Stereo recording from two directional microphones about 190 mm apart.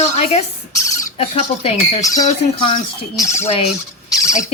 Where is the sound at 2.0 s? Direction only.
20° left (ahead or behind).